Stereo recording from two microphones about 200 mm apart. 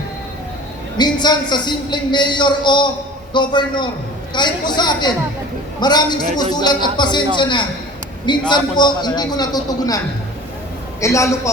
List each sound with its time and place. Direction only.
0.9 s a man's voice: 20° left (ahead or behind)
11.0 s a man's voice: 15° left (ahead or behind)